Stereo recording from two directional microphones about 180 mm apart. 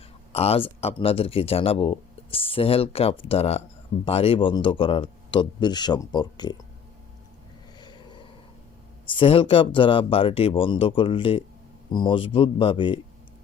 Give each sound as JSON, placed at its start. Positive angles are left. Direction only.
{"t": 0.3, "sound": "speech", "side_deg": 35}
{"t": 7.8, "sound": "a sound", "side_deg": 25}
{"t": 9.0, "sound": "speech", "side_deg": 30}